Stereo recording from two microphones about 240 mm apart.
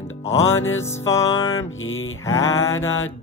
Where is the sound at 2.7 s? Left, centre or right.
Left.